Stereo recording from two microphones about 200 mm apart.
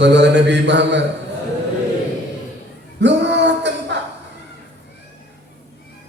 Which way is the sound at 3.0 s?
60° right (ahead or behind).